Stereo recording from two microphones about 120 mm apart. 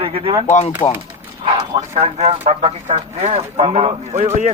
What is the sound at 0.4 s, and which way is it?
Speech, 70° left (ahead or behind).